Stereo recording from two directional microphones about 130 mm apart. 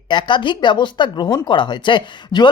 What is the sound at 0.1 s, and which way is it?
Speech, 35° left (ahead or behind).